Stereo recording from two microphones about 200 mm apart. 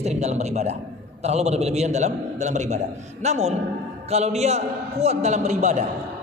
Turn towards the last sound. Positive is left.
turn(degrees=-35)  # may be behind; listen again after turning